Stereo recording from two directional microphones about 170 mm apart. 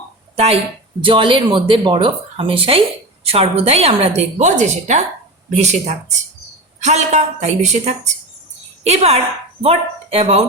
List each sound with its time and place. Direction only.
0.3 s a woman's voice: 35° right (ahead or behind)